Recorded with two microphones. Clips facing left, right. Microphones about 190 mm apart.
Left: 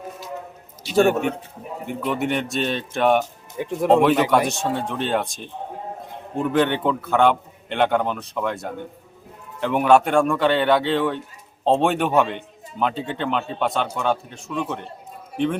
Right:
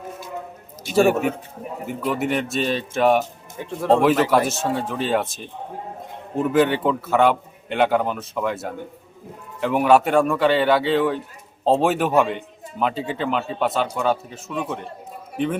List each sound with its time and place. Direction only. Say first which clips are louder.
0.9 s a man's voice: even; centre (ahead or behind)
3.6 s speech: left 2 dB; 15° left (ahead or behind)
4.4 s a man's voice: right 1 dB; 5° right (ahead or behind)